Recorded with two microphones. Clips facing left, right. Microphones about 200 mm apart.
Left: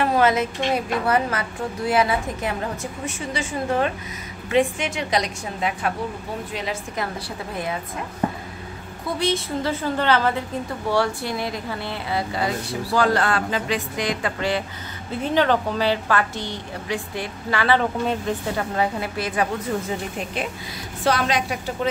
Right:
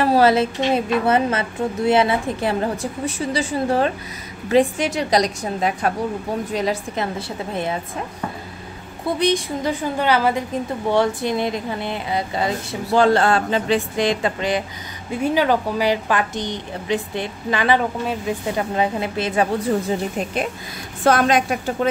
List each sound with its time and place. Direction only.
0.0 s a woman's voice: 35° right (ahead or behind)
7.0 s speech: 25° right (ahead or behind)
9.2 s a woman's voice: 15° right (ahead or behind)
15.0 s a woman's voice: 10° right (ahead or behind)
21.0 s a woman's voice: 50° right (ahead or behind)